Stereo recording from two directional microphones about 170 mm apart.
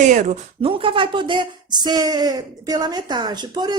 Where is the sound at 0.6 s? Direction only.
30° right (ahead or behind).